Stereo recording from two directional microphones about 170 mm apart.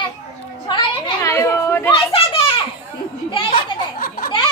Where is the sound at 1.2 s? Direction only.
15° left (ahead or behind).